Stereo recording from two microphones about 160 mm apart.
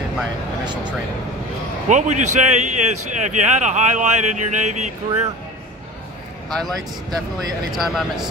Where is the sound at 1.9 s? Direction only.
50° right (ahead or behind).